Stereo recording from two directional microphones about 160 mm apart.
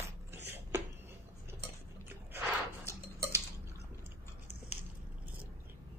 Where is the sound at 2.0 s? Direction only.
15° right (ahead or behind).